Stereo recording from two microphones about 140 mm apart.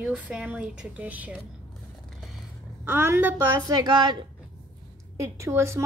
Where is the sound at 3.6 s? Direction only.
30° right (ahead or behind).